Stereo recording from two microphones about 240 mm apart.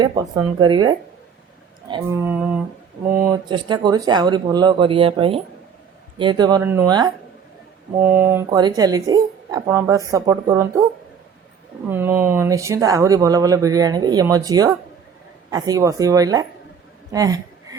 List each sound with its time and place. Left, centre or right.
0.0 s speech: centre
3.1 s speech: centre
11.9 s speech: centre
17.1 s a sound: centre